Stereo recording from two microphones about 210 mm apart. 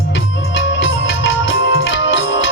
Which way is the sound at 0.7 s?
60° left (ahead or behind).